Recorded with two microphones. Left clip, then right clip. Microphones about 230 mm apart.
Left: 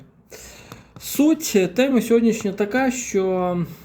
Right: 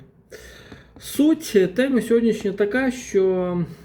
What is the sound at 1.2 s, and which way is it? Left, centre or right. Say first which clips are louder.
Speech: even; centre.